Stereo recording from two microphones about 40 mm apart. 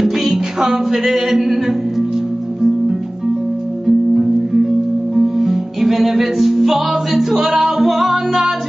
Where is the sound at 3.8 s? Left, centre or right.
Centre.